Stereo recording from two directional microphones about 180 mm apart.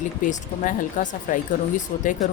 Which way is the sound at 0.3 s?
45° left (ahead or behind).